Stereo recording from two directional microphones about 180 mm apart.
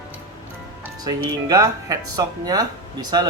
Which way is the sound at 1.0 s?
20° right (ahead or behind).